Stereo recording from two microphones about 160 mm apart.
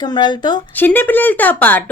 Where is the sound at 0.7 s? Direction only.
10° left (ahead or behind).